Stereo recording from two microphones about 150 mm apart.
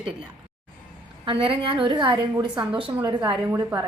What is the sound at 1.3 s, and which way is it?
A woman's voice, 35° right (ahead or behind).